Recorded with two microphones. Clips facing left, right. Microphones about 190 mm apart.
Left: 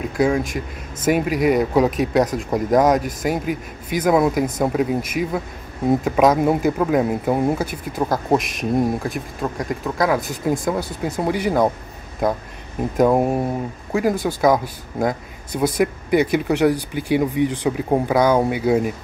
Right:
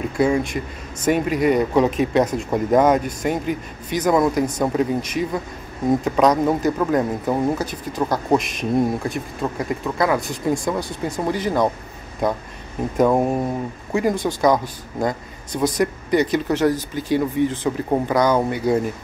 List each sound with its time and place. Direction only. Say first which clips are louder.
0.0 s speech: even; centre (ahead or behind)
12.9 s speech: left 1 dB; 5° left (ahead or behind)